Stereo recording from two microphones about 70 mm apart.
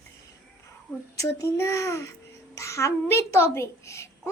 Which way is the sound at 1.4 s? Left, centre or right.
Left.